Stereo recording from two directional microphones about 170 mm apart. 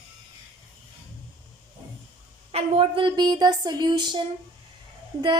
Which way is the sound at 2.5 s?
35° right (ahead or behind).